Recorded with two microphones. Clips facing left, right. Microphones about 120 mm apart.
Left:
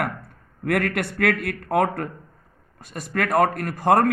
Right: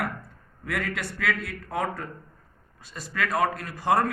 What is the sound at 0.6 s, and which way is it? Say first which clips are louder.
A man's voice: left 8 dB; 60° left (ahead or behind).